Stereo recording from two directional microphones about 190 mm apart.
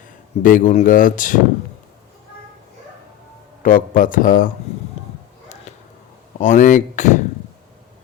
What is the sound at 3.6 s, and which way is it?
Speech, 45° left (ahead or behind).